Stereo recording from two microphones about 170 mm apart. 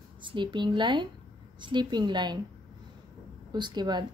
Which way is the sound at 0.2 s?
30° right (ahead or behind).